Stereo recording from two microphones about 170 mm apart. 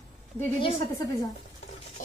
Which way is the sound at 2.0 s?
50° left (ahead or behind).